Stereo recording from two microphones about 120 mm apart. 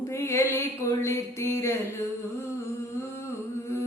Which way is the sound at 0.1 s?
25° left (ahead or behind).